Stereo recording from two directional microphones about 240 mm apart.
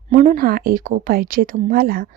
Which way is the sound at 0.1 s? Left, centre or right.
Right.